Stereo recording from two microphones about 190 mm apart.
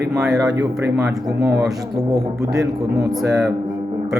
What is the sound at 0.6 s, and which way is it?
Speech, 15° right (ahead or behind).